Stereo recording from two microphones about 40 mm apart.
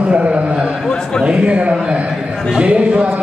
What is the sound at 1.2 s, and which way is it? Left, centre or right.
A man's voice, right.